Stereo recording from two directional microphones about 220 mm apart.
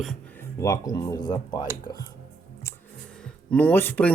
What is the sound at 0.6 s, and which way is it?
Speech, 15° left (ahead or behind).